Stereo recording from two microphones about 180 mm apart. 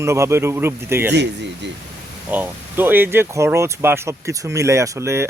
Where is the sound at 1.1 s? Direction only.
70° right (ahead or behind).